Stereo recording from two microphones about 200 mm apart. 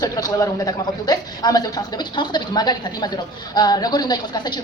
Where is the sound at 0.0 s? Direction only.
20° left (ahead or behind).